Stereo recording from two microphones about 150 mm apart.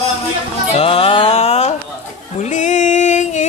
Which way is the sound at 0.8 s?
35° left (ahead or behind).